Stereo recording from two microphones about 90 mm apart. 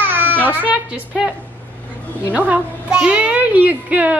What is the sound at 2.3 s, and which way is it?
A woman's voice, 15° right (ahead or behind).